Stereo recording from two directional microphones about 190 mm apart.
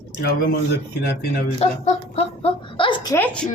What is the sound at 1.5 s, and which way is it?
A woman's voice, 35° left (ahead or behind).